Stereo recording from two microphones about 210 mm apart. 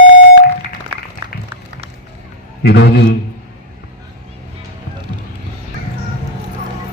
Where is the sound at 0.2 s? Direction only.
50° left (ahead or behind).